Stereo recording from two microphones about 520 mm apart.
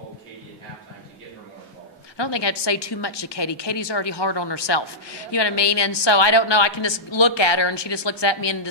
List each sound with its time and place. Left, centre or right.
2.1 s a woman's voice: left